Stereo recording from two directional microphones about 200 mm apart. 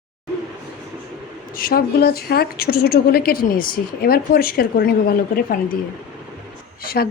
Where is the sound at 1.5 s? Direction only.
45° left (ahead or behind).